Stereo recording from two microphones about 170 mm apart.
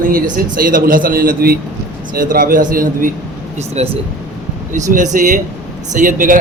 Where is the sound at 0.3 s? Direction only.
55° right (ahead or behind).